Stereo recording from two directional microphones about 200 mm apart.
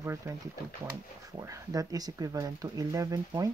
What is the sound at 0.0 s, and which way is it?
Speech, 15° right (ahead or behind).